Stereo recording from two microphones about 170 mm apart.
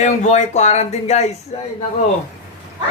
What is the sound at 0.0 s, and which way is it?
Speech, 45° left (ahead or behind).